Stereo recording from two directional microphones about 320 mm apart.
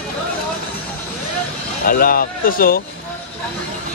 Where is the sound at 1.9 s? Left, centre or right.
Left.